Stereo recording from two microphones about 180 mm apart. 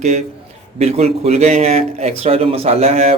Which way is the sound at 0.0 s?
40° right (ahead or behind).